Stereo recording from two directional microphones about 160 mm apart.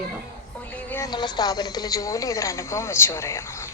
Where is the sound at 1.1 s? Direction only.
25° left (ahead or behind).